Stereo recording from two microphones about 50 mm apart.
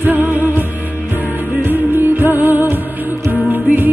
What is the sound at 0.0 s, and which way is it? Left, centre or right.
Music, right.